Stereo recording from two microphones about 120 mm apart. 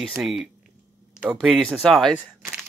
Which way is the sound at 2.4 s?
5° left (ahead or behind).